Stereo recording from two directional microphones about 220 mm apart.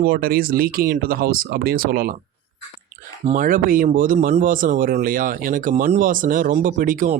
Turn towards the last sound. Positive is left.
turn(degrees=-35)  # may be behind; listen again after turning